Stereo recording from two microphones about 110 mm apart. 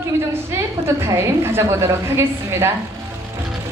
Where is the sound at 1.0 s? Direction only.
25° right (ahead or behind).